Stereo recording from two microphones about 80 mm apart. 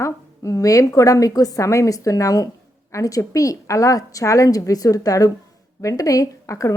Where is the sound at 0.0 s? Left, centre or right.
Left.